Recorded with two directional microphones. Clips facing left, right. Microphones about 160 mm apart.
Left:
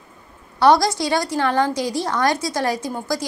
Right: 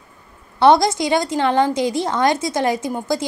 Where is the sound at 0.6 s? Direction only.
20° right (ahead or behind).